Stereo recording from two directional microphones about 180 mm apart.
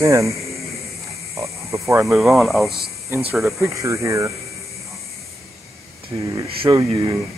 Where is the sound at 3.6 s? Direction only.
15° right (ahead or behind).